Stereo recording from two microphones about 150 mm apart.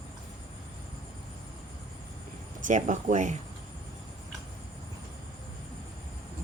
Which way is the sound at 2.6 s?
55° right (ahead or behind).